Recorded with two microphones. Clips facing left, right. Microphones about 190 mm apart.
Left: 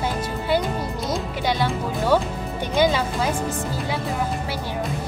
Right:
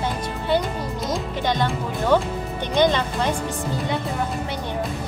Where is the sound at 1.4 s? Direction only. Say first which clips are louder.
Even; 10° left (ahead or behind).